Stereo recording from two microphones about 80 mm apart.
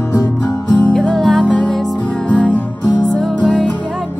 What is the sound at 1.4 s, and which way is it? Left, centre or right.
Music, centre.